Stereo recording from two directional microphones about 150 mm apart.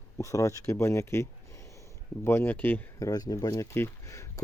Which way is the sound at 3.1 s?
25° left (ahead or behind).